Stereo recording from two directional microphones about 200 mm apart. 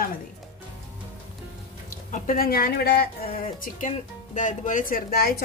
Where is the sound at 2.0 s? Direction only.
40° left (ahead or behind).